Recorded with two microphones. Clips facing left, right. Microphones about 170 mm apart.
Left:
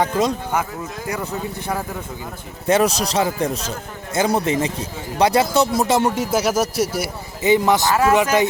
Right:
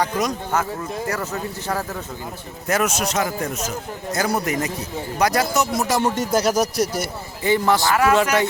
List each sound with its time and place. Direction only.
0.0 s a man's voice: 25° left (ahead or behind)
1.0 s speech: 15° left (ahead or behind)
2.6 s a man's voice: 30° left (ahead or behind)
6.0 s speech: 10° left (ahead or behind)
7.4 s a man's voice: 20° left (ahead or behind)